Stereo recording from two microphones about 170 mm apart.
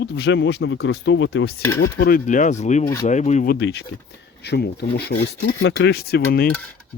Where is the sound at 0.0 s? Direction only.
90° left.